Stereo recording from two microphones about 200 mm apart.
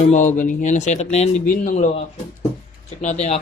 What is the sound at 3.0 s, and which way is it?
Speech, 35° left (ahead or behind).